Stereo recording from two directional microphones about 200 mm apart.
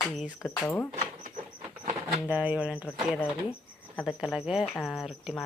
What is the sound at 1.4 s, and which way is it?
Rodents, 30° right (ahead or behind).